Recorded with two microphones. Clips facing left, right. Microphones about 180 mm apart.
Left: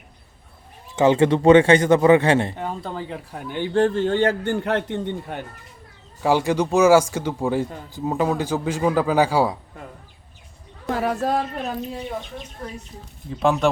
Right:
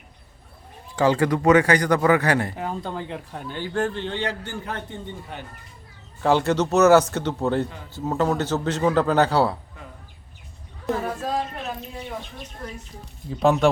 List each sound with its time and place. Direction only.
0.9 s speech: 20° left (ahead or behind)
2.6 s speech: centre (ahead or behind)
3.8 s a man's voice: 40° left (ahead or behind)
4.6 s speech: 85° left; by 5.5 s 60° left (ahead or behind)
6.2 s a man's voice: 10° left (ahead or behind)
10.9 s speech: 75° left (ahead or behind)
13.4 s speech: centre (ahead or behind)